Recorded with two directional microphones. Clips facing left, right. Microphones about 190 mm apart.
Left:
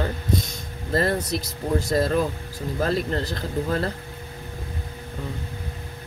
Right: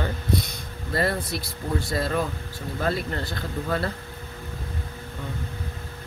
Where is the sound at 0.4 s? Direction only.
45° left (ahead or behind).